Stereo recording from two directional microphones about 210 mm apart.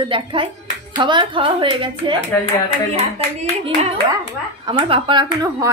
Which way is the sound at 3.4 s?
30° right (ahead or behind).